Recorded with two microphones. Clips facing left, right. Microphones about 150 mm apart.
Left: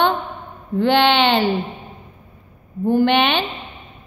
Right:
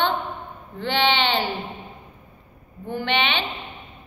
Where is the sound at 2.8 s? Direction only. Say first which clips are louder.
Left 9 dB; 45° left (ahead or behind).